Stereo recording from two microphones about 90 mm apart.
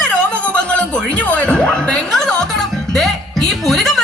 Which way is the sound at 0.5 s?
15° left (ahead or behind).